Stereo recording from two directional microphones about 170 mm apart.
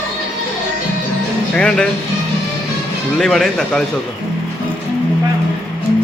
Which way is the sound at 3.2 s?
Centre (ahead or behind).